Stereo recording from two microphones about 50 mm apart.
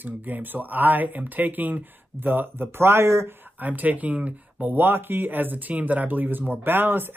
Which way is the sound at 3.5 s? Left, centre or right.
Right.